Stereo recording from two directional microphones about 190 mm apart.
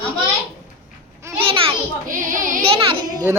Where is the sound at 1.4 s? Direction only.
30° right (ahead or behind).